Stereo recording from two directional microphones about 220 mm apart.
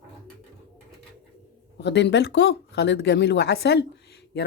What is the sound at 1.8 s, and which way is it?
Speech, 50° left (ahead or behind).